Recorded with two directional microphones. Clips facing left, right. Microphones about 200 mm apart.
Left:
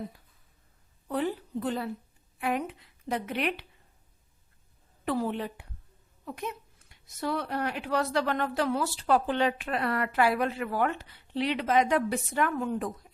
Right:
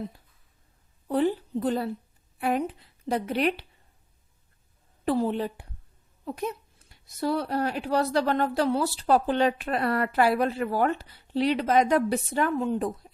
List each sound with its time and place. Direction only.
1.0 s a woman's voice: 30° right (ahead or behind)
5.0 s speech: 30° right (ahead or behind)